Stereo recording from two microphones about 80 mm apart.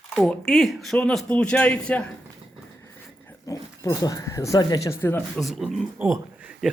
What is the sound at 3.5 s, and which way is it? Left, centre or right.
Speech, left.